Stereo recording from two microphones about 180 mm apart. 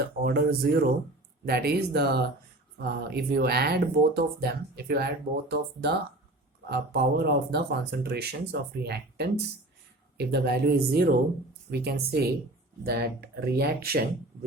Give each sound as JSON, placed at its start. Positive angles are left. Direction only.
{"t": 0.0, "sound": "speech", "side_deg": -60}